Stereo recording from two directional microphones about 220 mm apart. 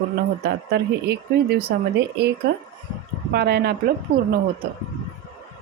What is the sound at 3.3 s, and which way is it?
Speech, 45° right (ahead or behind).